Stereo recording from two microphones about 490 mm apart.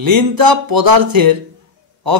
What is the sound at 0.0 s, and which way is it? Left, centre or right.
A man's voice, right.